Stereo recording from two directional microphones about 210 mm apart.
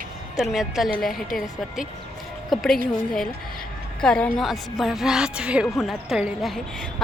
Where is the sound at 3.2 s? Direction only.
45° left (ahead or behind).